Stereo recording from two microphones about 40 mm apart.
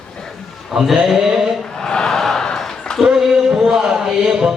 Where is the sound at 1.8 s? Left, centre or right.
Centre.